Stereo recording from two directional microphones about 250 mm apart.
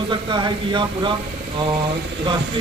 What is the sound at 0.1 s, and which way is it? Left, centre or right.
Speech, centre.